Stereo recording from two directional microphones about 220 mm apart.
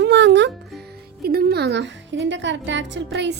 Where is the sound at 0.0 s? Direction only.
50° right (ahead or behind).